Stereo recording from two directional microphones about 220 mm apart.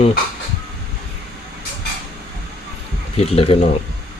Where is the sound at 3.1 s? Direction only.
25° left (ahead or behind).